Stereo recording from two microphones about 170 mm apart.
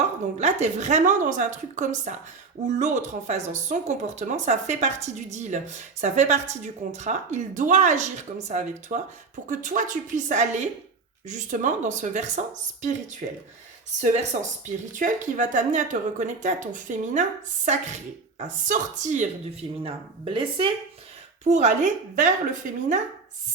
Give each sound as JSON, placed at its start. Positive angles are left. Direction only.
{"t": 0.3, "sound": "speech", "side_deg": -40}
{"t": 13.2, "sound": "speech", "side_deg": -50}
{"t": 19.8, "sound": "speech", "side_deg": -35}
{"t": 21.4, "sound": "speech", "side_deg": -45}